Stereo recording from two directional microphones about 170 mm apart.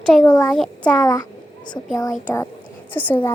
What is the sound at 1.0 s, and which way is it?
Speech, 20° left (ahead or behind).